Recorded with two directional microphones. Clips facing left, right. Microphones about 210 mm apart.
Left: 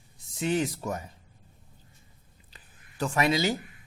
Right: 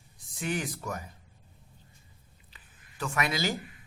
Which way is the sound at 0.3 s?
25° left (ahead or behind).